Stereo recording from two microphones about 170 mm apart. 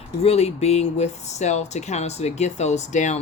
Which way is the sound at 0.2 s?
35° left (ahead or behind).